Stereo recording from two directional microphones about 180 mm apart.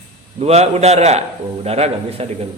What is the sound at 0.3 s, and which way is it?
A man's voice, 35° right (ahead or behind).